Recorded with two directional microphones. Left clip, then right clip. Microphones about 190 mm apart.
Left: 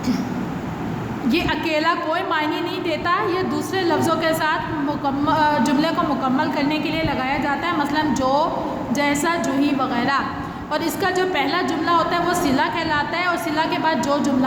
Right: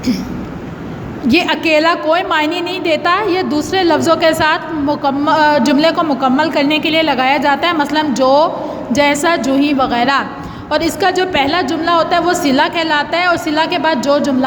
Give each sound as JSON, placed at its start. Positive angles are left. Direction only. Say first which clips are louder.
{"t": 1.3, "sound": "a woman's voice", "louder": "right 9 dB", "side_deg": -35}